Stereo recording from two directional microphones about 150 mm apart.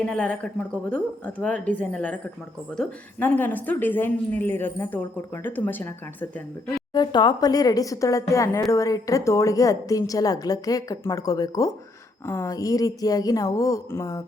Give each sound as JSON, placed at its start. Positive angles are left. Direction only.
{"t": 0.0, "sound": "a woman's voice", "side_deg": 10}
{"t": 6.9, "sound": "a woman's voice", "side_deg": 30}